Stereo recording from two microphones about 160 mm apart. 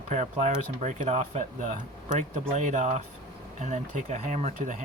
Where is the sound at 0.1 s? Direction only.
50° right (ahead or behind).